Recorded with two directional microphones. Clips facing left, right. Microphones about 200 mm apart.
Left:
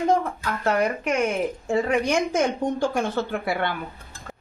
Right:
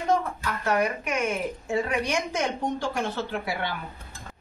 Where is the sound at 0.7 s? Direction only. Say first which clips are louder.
Left 3 dB; 50° left (ahead or behind).